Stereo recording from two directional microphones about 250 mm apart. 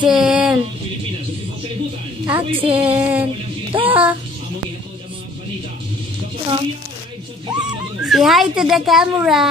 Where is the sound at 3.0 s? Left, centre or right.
Centre.